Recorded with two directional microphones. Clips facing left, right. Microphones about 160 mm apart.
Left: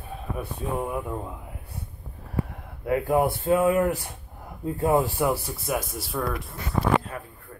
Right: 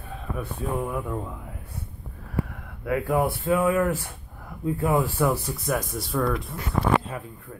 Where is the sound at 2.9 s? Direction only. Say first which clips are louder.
Left 1 dB; 20° left (ahead or behind).